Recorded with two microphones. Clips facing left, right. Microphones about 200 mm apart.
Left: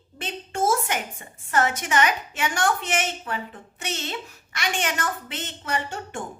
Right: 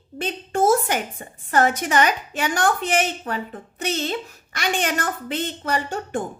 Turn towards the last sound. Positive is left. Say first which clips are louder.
# right 5 dB
turn(degrees=-35)  # may be behind; listen again after turning